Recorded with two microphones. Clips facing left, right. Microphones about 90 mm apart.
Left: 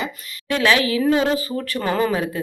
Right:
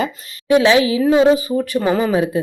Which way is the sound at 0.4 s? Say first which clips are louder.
Right 6 dB; 20° right (ahead or behind).